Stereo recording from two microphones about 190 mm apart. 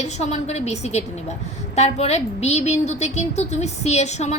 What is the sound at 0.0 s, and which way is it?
A woman's voice, 35° left (ahead or behind).